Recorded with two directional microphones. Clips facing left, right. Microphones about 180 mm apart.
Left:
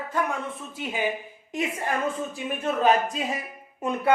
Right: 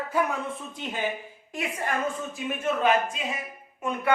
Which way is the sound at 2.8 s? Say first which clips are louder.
Left 4 dB; 35° left (ahead or behind).